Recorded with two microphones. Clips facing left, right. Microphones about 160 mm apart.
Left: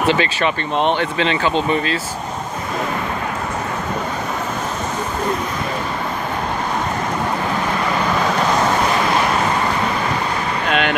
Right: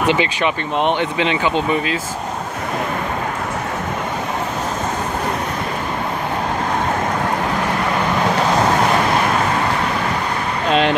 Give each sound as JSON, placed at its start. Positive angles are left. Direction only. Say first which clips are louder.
{"t": 0.0, "sound": "speech", "louder": "even", "side_deg": -15}
{"t": 10.7, "sound": "speech", "louder": "right 4 dB", "side_deg": -30}